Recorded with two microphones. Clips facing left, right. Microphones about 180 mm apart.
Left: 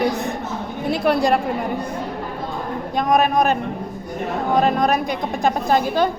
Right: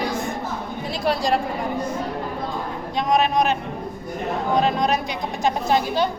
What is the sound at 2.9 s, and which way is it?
A man's voice, 50° left (ahead or behind).